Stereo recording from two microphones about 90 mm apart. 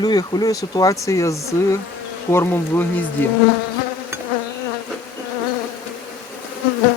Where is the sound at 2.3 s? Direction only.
25° left (ahead or behind).